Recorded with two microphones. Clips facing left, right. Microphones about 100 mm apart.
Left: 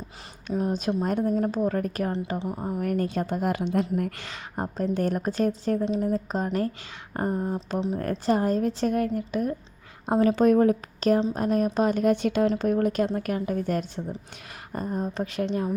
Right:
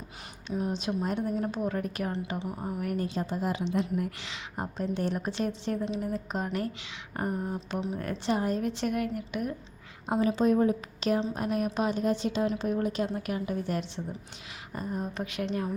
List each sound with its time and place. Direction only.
0.5 s a woman's voice: 40° left (ahead or behind)
2.4 s speech: 25° left (ahead or behind)
2.8 s a woman's voice: 50° left (ahead or behind); by 7.9 s 30° left (ahead or behind)
7.9 s a woman's voice: 40° left (ahead or behind)
10.2 s a woman's voice: 60° left (ahead or behind)
11.0 s a woman's voice: 45° left (ahead or behind)
11.9 s a woman's voice: 60° left (ahead or behind); by 15.7 s 25° left (ahead or behind)